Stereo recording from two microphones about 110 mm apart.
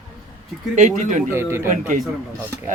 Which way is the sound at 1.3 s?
25° right (ahead or behind).